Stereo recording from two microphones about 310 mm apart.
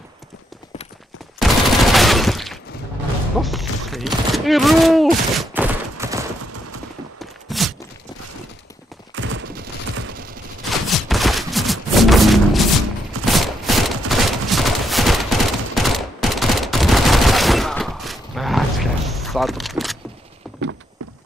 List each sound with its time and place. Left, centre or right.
1.4 s fusillade: centre
3.3 s speech: centre
5.3 s fusillade: centre
7.2 s walk: centre
9.1 s fusillade: right
10.7 s fusillade: centre
20.4 s clip-clop: centre